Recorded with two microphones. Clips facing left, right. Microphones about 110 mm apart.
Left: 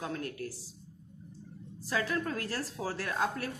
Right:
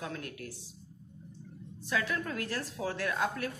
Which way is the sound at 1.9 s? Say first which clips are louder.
Left 1 dB; 35° left (ahead or behind).